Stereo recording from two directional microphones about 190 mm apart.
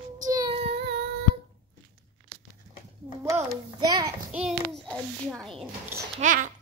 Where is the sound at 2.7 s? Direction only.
15° right (ahead or behind).